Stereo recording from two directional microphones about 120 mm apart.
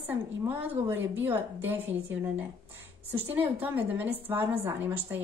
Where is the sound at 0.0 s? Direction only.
15° right (ahead or behind).